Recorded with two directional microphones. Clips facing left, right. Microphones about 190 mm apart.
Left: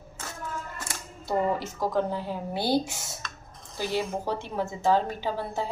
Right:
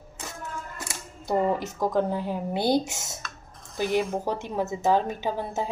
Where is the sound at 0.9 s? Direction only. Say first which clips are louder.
Right 3 dB; 20° right (ahead or behind).